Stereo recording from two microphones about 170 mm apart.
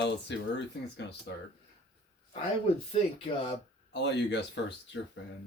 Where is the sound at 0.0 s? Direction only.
90° left.